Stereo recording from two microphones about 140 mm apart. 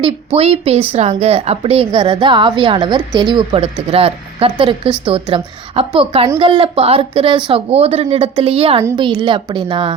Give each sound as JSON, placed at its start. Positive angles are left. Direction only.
{"t": 0.0, "sound": "a woman's voice", "side_deg": -45}